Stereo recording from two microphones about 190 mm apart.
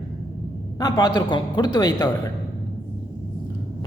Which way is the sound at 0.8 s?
25° left (ahead or behind).